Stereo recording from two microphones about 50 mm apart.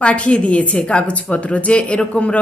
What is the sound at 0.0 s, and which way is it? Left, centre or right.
A woman's voice, left.